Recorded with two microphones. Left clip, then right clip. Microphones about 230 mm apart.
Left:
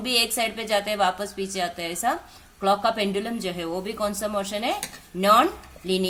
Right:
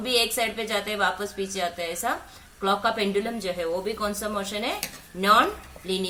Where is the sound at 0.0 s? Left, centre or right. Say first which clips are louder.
Even; left.